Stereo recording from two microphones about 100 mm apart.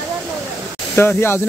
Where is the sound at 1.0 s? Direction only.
25° left (ahead or behind).